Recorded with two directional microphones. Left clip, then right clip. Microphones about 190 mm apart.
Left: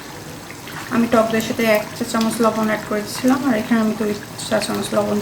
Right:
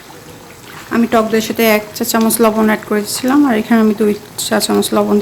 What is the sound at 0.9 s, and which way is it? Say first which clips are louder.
A woman's voice: right 4 dB; 65° right (ahead or behind).